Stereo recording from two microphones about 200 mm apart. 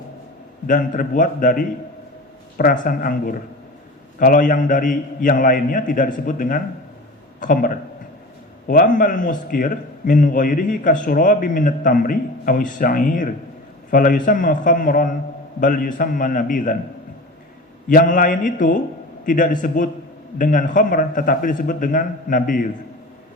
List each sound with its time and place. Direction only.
0.7 s a man's voice: 40° left (ahead or behind)
17.8 s a man's voice: 40° left (ahead or behind)